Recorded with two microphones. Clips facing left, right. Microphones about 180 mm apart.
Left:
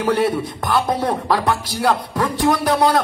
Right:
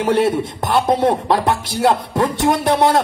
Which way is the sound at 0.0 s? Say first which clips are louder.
Right 2 dB; 25° right (ahead or behind).